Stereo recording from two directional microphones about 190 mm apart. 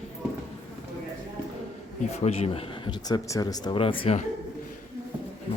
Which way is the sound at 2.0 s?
35° left (ahead or behind).